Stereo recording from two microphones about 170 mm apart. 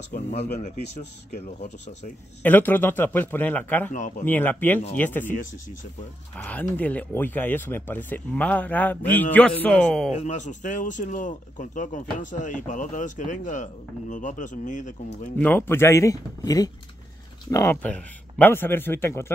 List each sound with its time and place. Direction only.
0.1 s speech: 40° left (ahead or behind)
2.4 s speech: 10° left (ahead or behind)
6.3 s speech: 10° left (ahead or behind)
10.1 s speech: 45° left (ahead or behind)
15.3 s speech: 10° left (ahead or behind)